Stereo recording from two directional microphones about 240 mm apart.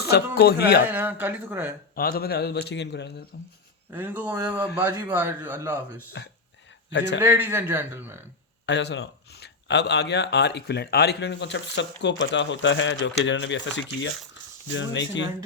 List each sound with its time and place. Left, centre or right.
0.0 s speech: left
0.9 s a man's voice: centre
2.0 s speech: left
3.9 s a man's voice: centre
6.2 s speech: left
7.2 s a man's voice: centre
8.6 s speech: left